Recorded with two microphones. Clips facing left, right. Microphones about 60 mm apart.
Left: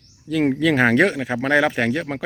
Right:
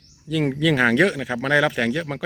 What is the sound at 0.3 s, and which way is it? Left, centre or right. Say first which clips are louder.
Speech: left 2 dB; left.